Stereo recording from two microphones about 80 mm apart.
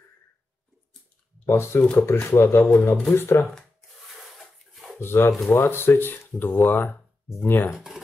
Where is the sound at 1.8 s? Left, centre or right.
Centre.